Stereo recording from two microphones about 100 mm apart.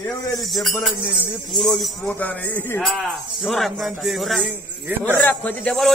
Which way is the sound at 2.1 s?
15° left (ahead or behind).